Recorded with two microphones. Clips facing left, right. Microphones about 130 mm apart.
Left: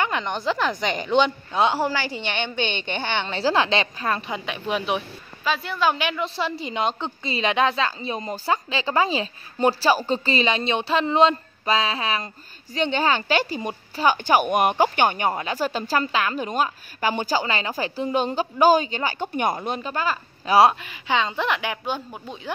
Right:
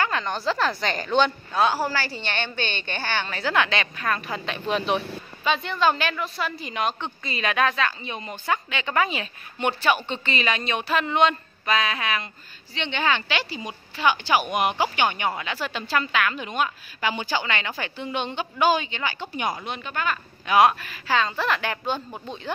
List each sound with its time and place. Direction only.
0.0 s a woman's voice: 20° left (ahead or behind)
4.5 s speech: 10° left (ahead or behind)
6.2 s a woman's voice: 25° left (ahead or behind)
20.8 s speech: 20° left (ahead or behind)